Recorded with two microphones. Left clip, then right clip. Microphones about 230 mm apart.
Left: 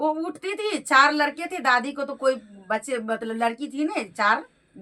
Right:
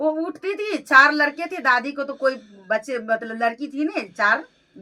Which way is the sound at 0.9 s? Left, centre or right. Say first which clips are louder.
Right 4 dB; centre.